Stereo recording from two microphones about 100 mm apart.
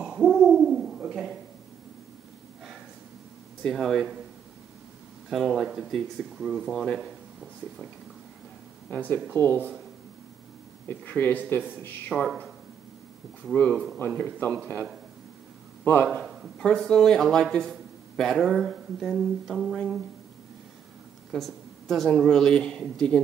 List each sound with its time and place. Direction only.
0.0 s hoot: 5° right (ahead or behind)
3.6 s speech: centre (ahead or behind)
5.3 s speech: 5° right (ahead or behind)
8.9 s speech: 15° left (ahead or behind)
10.9 s speech: 20° left (ahead or behind)
12.1 s speech: centre (ahead or behind)
13.5 s speech: 10° left (ahead or behind)
15.8 s a man's voice: 20° left (ahead or behind)
16.1 s speech: centre (ahead or behind)
21.3 s speech: centre (ahead or behind)